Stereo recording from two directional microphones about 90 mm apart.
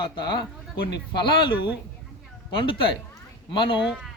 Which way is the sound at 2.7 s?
70° left (ahead or behind).